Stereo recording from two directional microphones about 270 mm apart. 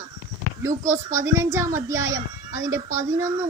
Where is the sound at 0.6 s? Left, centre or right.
Centre.